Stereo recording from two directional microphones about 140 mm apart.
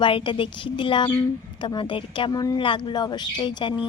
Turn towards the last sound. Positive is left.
turn(degrees=35)  # may be behind; listen again after turning